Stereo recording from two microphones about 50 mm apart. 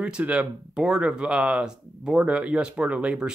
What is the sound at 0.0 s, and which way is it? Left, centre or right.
Speech, right.